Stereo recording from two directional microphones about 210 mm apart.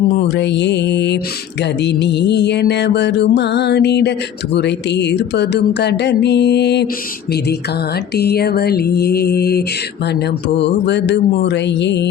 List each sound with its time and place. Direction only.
0.3 s mantra: 55° left (ahead or behind)
1.8 s music: 55° left (ahead or behind)
8.1 s music: 50° left (ahead or behind)
10.6 s mantra: 55° left (ahead or behind)